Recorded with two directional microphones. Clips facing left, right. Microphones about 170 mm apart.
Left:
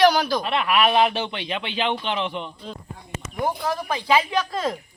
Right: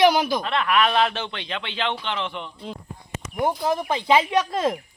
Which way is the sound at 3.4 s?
20° right (ahead or behind).